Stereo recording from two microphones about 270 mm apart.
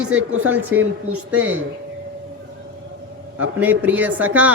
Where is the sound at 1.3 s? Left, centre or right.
Centre.